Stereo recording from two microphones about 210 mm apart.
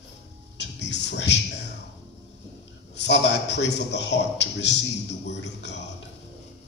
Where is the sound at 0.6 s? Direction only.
55° left (ahead or behind).